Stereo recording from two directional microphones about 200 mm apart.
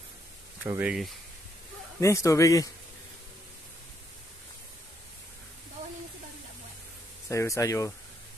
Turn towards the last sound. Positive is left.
turn(degrees=15)  # may be behind; listen again after turning